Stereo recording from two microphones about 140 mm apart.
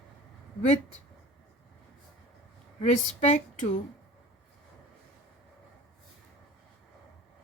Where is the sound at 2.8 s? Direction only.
55° left (ahead or behind).